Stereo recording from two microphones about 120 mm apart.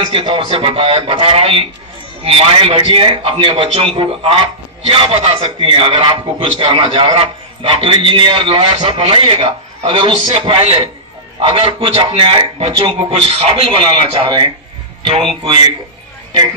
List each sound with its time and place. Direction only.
0.1 s a man's voice: 45° right (ahead or behind)